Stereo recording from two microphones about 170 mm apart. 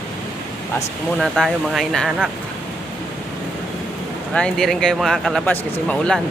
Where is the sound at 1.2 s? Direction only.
Centre (ahead or behind).